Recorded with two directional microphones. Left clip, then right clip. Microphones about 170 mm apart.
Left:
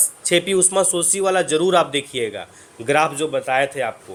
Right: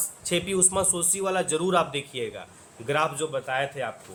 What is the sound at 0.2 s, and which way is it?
A man's voice, 25° left (ahead or behind).